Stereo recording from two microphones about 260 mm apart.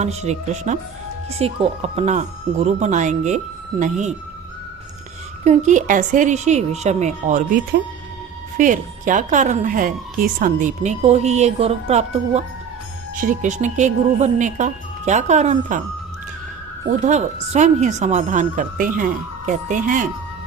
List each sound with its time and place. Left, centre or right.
0.0 s a woman's voice: right
5.5 s a woman's voice: right
17.0 s a woman's voice: right